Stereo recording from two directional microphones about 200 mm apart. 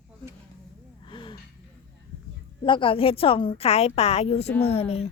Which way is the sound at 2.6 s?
25° left (ahead or behind).